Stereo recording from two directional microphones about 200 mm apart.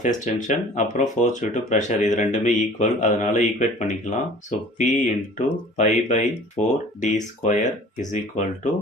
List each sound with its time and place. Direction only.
0.0 s speech: 40° left (ahead or behind)